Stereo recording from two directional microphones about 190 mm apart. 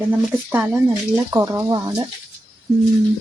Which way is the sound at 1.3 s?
15° right (ahead or behind).